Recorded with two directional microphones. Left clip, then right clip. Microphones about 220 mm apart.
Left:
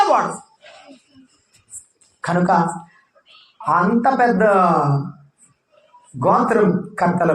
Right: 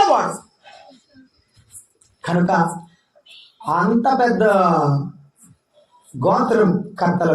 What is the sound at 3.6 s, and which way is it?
Speech, 25° left (ahead or behind).